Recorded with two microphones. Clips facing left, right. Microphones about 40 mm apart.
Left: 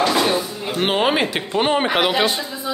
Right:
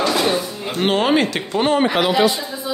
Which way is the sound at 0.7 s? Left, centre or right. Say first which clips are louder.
Right 1 dB; centre.